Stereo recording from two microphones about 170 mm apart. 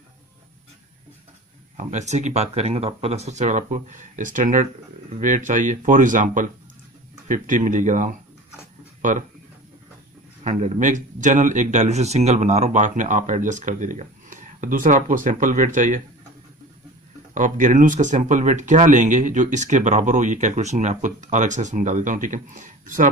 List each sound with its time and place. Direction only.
1.7 s speech: 45° right (ahead or behind)
9.0 s a sound: 50° right (ahead or behind)
10.4 s speech: 45° right (ahead or behind)
17.3 s speech: 50° right (ahead or behind)